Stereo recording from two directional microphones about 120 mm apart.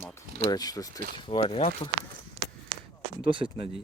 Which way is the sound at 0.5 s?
30° left (ahead or behind).